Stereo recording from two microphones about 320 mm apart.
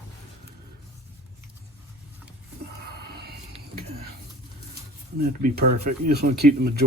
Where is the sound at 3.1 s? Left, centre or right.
Right.